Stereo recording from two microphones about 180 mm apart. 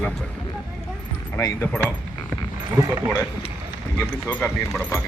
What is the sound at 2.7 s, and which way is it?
Speech, 15° right (ahead or behind).